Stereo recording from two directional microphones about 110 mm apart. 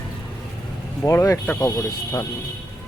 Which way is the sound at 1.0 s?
30° left (ahead or behind).